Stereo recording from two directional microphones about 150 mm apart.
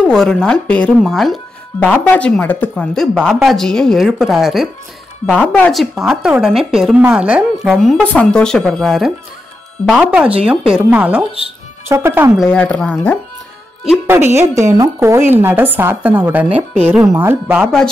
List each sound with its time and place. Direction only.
0.0 s a woman's voice: 5° left (ahead or behind)
5.2 s a woman's voice: 10° left (ahead or behind); by 12.3 s 15° right (ahead or behind)
12.4 s speech: 5° left (ahead or behind)
14.0 s a woman's voice: 15° right (ahead or behind)